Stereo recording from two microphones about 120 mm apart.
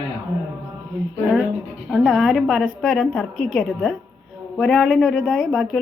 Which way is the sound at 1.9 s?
5° right (ahead or behind).